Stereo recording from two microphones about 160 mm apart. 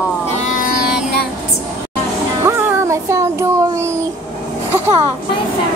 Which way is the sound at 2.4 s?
15° right (ahead or behind).